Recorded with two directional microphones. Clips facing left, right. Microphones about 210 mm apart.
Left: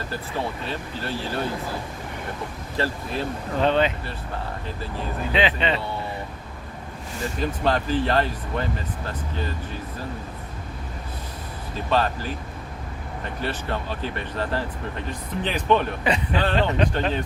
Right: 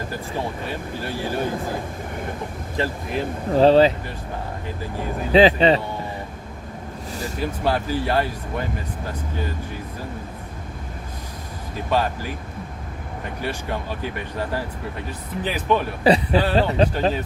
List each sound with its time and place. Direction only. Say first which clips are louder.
0.1 s speech: right 1 dB; 15° right (ahead or behind)
2.7 s speech: right 2 dB; 15° right (ahead or behind)
3.5 s speech: right 7 dB; 35° right (ahead or behind)
4.8 s speech: right 3 dB; 15° right (ahead or behind)
5.3 s speech: right 9 dB; 35° right (ahead or behind)
7.3 s speech: even; 10° right (ahead or behind)
11.9 s speech: even; 10° right (ahead or behind)
13.4 s speech: right 1 dB; 10° right (ahead or behind)
16.0 s speech: right 10 dB; 35° right (ahead or behind)